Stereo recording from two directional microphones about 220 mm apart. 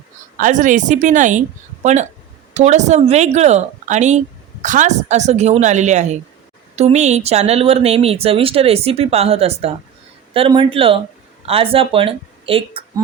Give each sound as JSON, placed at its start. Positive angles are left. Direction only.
{"t": 0.3, "sound": "speech", "side_deg": -35}